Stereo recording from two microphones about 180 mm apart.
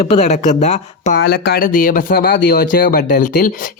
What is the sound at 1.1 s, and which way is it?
Speech, 60° left (ahead or behind).